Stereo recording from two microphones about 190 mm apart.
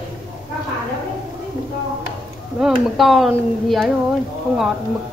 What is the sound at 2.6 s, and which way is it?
Speech, centre (ahead or behind).